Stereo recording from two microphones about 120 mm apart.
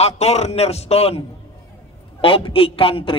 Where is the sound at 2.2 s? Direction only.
50° left (ahead or behind).